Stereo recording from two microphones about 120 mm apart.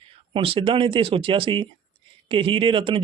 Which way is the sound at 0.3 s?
50° right (ahead or behind).